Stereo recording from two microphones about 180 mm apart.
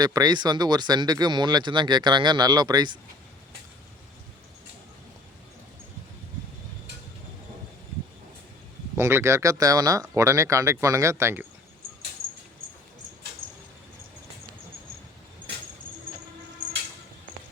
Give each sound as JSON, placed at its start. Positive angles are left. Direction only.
{"t": 0.0, "sound": "speech", "side_deg": -20}
{"t": 9.0, "sound": "speech", "side_deg": -15}